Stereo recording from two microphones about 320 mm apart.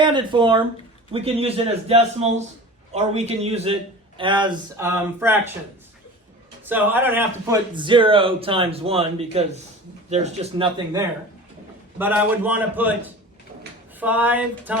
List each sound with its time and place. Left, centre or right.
0.0 s a man's voice: centre
6.7 s a man's voice: centre
11.9 s a man's voice: centre